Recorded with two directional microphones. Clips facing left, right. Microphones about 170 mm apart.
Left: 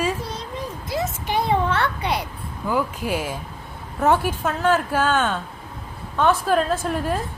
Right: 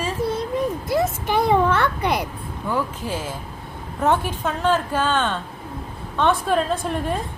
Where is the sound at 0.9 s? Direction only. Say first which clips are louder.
Right 1 dB; 55° right (ahead or behind).